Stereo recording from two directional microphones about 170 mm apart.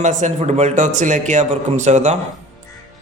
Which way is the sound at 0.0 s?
45° right (ahead or behind).